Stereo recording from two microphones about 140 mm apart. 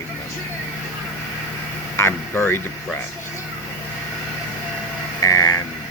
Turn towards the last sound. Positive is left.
turn(degrees=25)  # may be behind; listen again after turning